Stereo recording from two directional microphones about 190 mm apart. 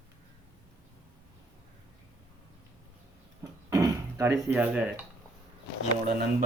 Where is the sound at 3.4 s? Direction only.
20° right (ahead or behind).